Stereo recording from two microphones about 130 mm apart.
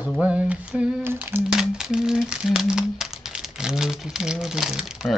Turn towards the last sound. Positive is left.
turn(degrees=-5)  # may be behind; listen again after turning